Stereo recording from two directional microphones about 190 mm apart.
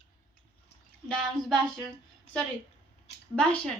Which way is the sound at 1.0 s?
5° left (ahead or behind).